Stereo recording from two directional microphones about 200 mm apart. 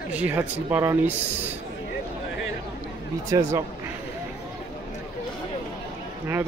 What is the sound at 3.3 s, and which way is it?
Speech, 15° right (ahead or behind).